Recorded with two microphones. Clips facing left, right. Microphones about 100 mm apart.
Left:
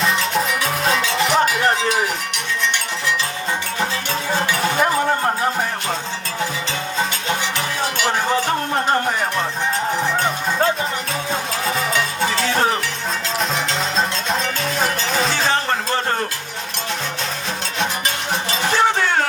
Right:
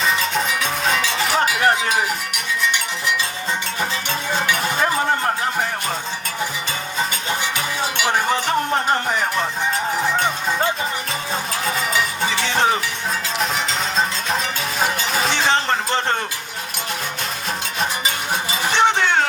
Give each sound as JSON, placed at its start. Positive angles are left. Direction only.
{"t": 0.0, "sound": "cowbell", "side_deg": 0}
{"t": 11.6, "sound": "music", "side_deg": -5}
{"t": 13.4, "sound": "music", "side_deg": 0}
{"t": 15.4, "sound": "music", "side_deg": -20}
{"t": 18.8, "sound": "music", "side_deg": -20}